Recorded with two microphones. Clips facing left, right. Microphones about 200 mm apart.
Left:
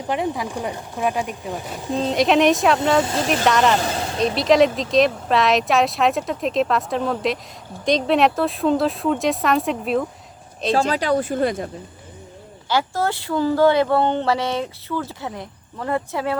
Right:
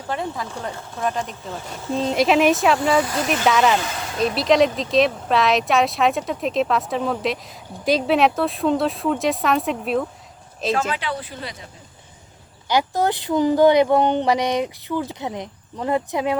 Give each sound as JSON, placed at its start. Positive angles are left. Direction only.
{"t": 0.1, "sound": "speech", "side_deg": 15}
{"t": 1.9, "sound": "speech", "side_deg": 0}
{"t": 3.0, "sound": "speech", "side_deg": 25}
{"t": 3.4, "sound": "speech", "side_deg": 0}
{"t": 3.8, "sound": "speech", "side_deg": 35}
{"t": 4.2, "sound": "speech", "side_deg": 0}
{"t": 10.7, "sound": "speech", "side_deg": 35}
{"t": 12.6, "sound": "speech", "side_deg": -15}